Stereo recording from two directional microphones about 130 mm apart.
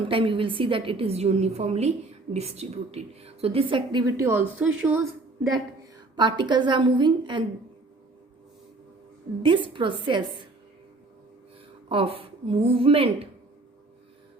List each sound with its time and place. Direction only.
0.0 s a woman's voice: 45° right (ahead or behind)
4.0 s a woman's voice: 20° right (ahead or behind)
6.1 s a woman's voice: 35° right (ahead or behind)
9.4 s a woman's voice: 40° right (ahead or behind)
11.9 s a woman's voice: 45° right (ahead or behind)